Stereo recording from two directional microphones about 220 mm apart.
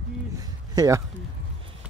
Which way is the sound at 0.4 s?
15° right (ahead or behind).